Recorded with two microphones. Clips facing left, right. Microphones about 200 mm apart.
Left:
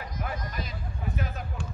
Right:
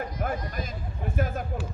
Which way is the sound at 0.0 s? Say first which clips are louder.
Right 5 dB; 45° right (ahead or behind).